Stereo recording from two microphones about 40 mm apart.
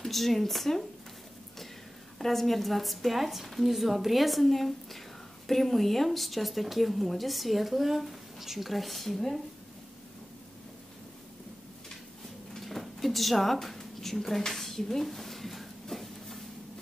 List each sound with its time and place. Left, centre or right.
0.0 s speech: centre
2.1 s speech: centre
12.5 s a sound: centre